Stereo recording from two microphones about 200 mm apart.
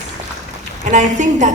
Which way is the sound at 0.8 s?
40° right (ahead or behind).